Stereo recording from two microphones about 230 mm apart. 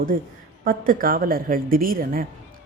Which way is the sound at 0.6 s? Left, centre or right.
Right.